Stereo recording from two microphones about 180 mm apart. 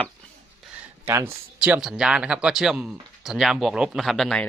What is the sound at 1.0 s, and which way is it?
Speech, 10° right (ahead or behind).